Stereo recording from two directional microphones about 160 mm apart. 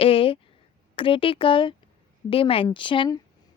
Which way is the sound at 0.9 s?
35° left (ahead or behind).